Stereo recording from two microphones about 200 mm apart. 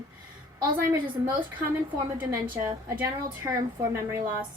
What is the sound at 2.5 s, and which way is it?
A woman's voice, 10° right (ahead or behind).